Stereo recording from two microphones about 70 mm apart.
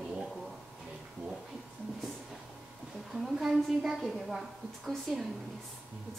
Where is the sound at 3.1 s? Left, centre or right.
Centre.